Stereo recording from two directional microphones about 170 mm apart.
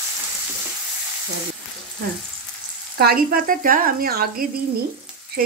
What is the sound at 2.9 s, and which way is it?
Speech, 60° right (ahead or behind).